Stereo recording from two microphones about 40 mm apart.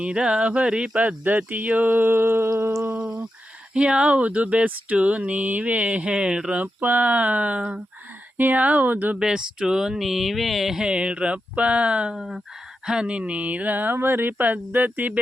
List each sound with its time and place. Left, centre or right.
0.0 s speech: right
0.9 s speech: right
2.1 s humming: right
3.8 s speech: right
6.6 s speech: right
9.1 s speech: centre
10.0 s a sound: centre
10.8 s speech: right
12.1 s a sound: centre
12.8 s speech: centre
13.1 s speech: right
13.9 s speech: right